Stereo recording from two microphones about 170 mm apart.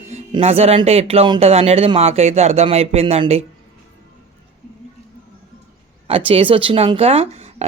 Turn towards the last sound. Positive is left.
turn(degrees=-35)  # may be behind; listen again after turning